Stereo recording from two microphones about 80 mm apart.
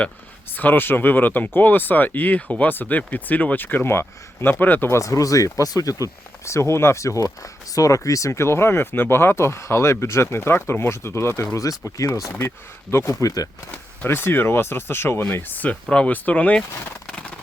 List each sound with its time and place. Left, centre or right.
0.5 s speech: left
4.9 s speech: left
11.5 s speech: left
12.4 s speech: left
13.1 s speech: left
13.7 s speech: left
15.7 s speech: centre